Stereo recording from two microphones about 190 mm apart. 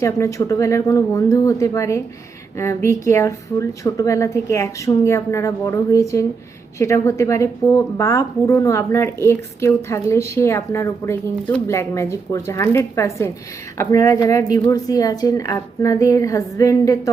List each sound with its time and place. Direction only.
0.0 s a woman's voice: 15° left (ahead or behind)